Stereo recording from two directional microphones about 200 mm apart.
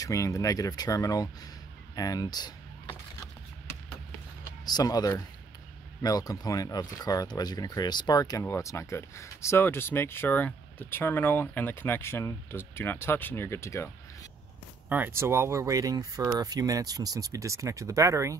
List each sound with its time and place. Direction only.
0.0 s speech: 15° left (ahead or behind)
2.0 s vehicle: 20° left (ahead or behind)
4.6 s speech: 20° left (ahead or behind)
14.9 s speech: 10° right (ahead or behind)